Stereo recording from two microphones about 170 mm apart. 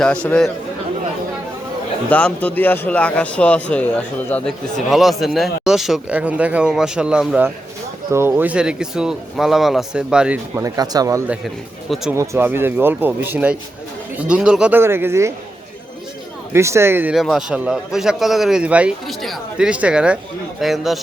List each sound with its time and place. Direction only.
0.0 s speech: 5° left (ahead or behind)
2.0 s speech: 10° left (ahead or behind); by 15.3 s 15° right (ahead or behind)
16.5 s speech: 15° right (ahead or behind)